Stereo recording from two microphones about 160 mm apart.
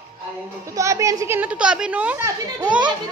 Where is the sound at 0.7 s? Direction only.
20° right (ahead or behind).